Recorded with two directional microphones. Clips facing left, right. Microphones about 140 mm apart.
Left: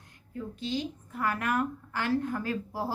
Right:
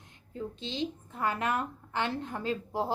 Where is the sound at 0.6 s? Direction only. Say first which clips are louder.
Left 3 dB; 25° right (ahead or behind).